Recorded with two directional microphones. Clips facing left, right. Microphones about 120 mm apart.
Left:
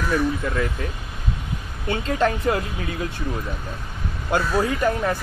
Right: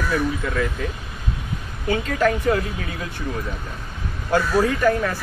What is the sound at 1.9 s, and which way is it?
Speech, 25° left (ahead or behind).